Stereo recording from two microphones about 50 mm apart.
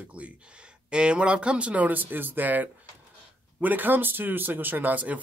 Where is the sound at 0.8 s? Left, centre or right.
Right.